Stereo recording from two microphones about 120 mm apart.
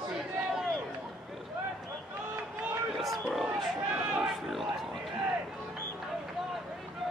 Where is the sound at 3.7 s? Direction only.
10° right (ahead or behind).